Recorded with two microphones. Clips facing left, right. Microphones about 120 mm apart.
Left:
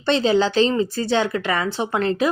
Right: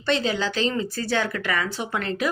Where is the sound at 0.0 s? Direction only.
30° left (ahead or behind).